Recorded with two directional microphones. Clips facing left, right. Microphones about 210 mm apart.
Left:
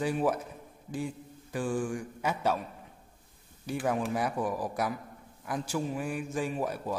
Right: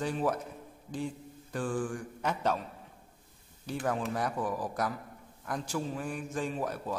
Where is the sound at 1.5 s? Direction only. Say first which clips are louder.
Left 2 dB; 10° left (ahead or behind).